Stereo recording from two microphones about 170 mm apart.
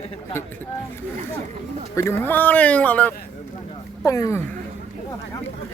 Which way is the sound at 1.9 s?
15° left (ahead or behind).